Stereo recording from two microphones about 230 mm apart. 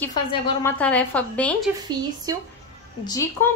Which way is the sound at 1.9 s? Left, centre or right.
Centre.